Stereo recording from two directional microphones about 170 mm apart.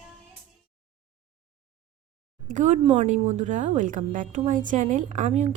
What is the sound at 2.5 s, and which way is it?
A woman's voice, 45° right (ahead or behind).